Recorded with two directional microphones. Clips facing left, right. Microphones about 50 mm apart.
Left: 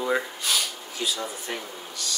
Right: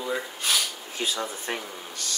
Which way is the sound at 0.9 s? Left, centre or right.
Right.